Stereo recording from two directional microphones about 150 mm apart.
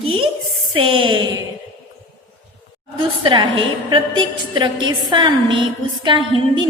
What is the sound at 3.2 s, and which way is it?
A woman's voice, 35° right (ahead or behind).